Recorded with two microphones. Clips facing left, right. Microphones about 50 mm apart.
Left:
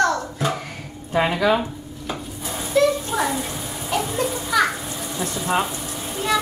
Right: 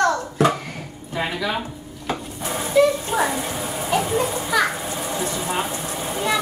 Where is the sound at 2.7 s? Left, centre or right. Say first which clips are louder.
Right 1 dB; centre.